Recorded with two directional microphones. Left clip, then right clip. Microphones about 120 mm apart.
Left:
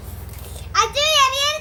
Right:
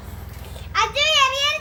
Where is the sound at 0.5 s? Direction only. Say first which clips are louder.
Left 2 dB; 50° left (ahead or behind).